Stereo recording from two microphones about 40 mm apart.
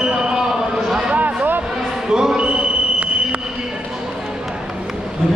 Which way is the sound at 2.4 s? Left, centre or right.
Right.